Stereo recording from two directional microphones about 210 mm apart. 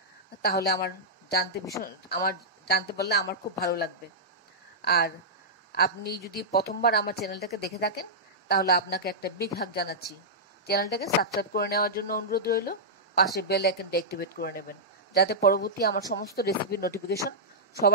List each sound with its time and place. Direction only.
0.4 s a woman's voice: 50° left (ahead or behind)